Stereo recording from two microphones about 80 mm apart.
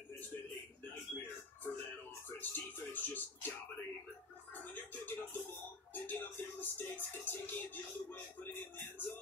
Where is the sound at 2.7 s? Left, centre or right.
Left.